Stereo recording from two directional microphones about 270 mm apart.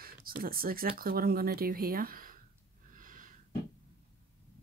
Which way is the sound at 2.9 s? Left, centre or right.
Right.